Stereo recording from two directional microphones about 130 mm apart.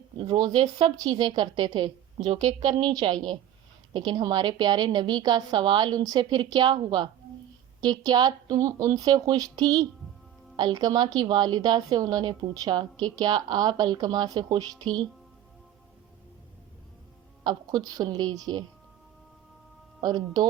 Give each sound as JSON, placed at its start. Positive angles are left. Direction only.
{"t": 0.8, "sound": "a woman's voice", "side_deg": -35}
{"t": 2.2, "sound": "speech", "side_deg": -55}
{"t": 2.9, "sound": "a woman's voice", "side_deg": -30}
{"t": 17.4, "sound": "a woman's voice", "side_deg": -30}
{"t": 20.0, "sound": "a woman's voice", "side_deg": -30}